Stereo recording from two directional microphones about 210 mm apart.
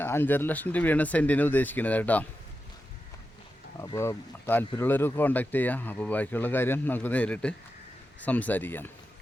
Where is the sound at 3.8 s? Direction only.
15° left (ahead or behind).